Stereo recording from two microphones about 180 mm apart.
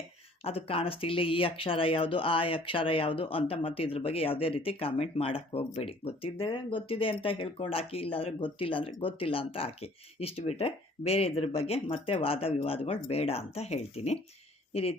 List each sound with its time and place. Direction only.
0.4 s speech: 30° left (ahead or behind)